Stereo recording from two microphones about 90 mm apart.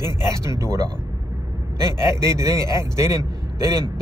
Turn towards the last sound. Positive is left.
turn(degrees=-35)  # may be behind; listen again after turning